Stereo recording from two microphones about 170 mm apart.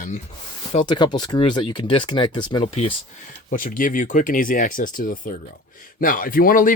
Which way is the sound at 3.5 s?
55° left (ahead or behind).